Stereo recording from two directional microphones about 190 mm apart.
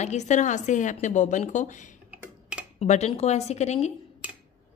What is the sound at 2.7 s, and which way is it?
A woman's voice, 35° left (ahead or behind).